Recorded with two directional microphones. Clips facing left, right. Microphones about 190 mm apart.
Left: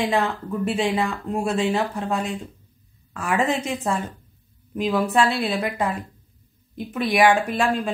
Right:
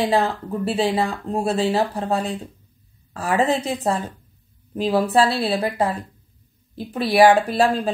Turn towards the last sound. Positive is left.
turn(degrees=-35)  # may be behind; listen again after turning